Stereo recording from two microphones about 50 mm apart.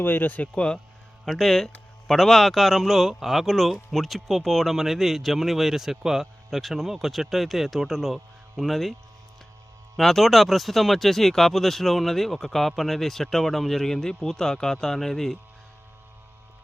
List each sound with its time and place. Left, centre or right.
0.0 s speech: left
1.2 s speech: centre
10.0 s speech: centre